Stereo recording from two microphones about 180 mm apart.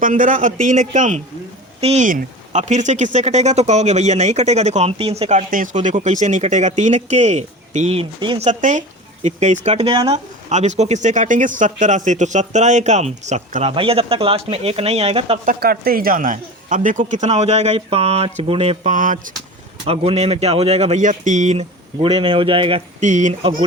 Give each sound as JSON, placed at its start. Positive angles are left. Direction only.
{"t": 0.0, "sound": "speech", "side_deg": -50}
{"t": 2.0, "sound": "speech", "side_deg": -45}
{"t": 8.4, "sound": "speech", "side_deg": -40}
{"t": 15.4, "sound": "speech", "side_deg": -55}
{"t": 19.8, "sound": "speech", "side_deg": -35}
{"t": 23.0, "sound": "speech", "side_deg": -45}
{"t": 23.4, "sound": "a sound", "side_deg": -25}